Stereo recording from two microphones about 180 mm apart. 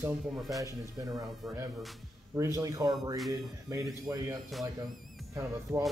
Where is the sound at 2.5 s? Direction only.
20° right (ahead or behind).